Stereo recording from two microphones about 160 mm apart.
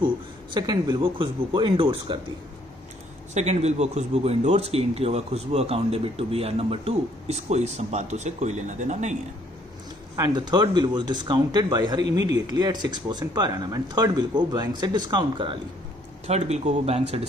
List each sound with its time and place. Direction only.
0.6 s speech: 25° right (ahead or behind)
3.3 s speech: 45° right (ahead or behind)
10.1 s speech: 25° right (ahead or behind)
16.3 s speech: 45° right (ahead or behind)